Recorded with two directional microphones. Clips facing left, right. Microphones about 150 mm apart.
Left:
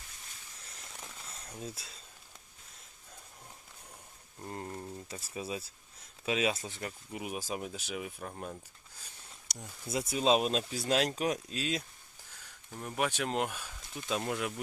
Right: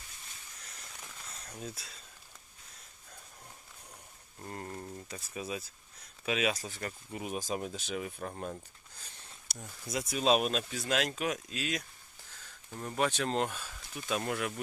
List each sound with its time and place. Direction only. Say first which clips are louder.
1.6 s speech: even; 30° left (ahead or behind)
4.4 s a sound: left 1 dB; 15° left (ahead or behind)
5.0 s speech: even; 30° left (ahead or behind); by 8.5 s centre (ahead or behind)
9.6 s speech: left 1 dB; centre (ahead or behind)
10.1 s speech: even; 25° left (ahead or behind)
12.3 s a sound: right 1 dB; 15° left (ahead or behind)
12.7 s speech: right 2 dB; 5° left (ahead or behind)